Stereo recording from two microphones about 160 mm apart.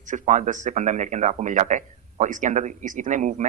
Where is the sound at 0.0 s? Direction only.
50° right (ahead or behind).